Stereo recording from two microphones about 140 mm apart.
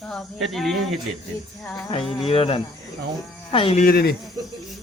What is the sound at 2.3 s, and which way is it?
Speech, 40° left (ahead or behind).